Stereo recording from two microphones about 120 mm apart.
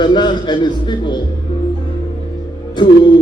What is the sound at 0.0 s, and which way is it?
A man's voice, 40° left (ahead or behind).